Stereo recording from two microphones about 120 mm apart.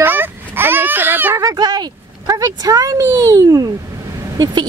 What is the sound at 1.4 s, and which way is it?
Speech, 30° right (ahead or behind).